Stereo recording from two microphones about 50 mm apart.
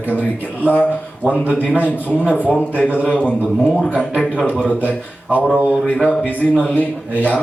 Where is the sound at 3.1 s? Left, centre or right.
Left.